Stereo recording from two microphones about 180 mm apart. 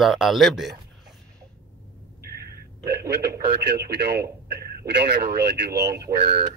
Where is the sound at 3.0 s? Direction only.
65° right (ahead or behind).